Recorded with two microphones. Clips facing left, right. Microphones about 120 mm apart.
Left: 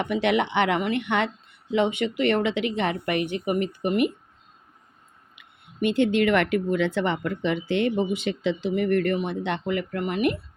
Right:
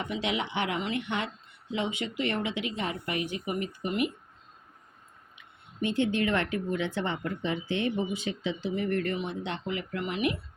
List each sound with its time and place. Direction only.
0.0 s speech: 60° left (ahead or behind)
5.8 s speech: 75° left (ahead or behind); by 10.3 s 50° left (ahead or behind)